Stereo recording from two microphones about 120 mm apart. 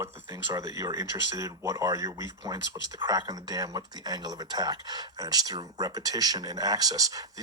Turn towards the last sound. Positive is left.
turn(degrees=-30)  # may be behind; listen again after turning